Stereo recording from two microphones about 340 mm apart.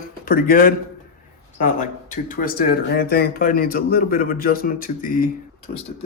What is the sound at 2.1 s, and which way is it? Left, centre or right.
Speech, left.